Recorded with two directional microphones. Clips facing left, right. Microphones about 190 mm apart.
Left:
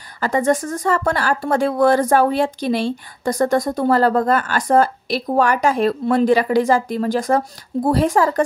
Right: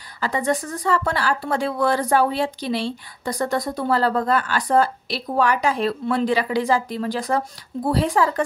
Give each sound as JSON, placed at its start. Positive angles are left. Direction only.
{"t": 0.2, "sound": "speech", "side_deg": 45}